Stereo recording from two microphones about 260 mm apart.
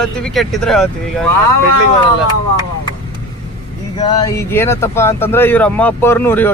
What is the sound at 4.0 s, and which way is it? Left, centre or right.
Speech, centre.